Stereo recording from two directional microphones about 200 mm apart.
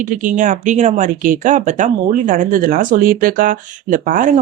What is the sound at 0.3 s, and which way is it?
Speech, 40° right (ahead or behind).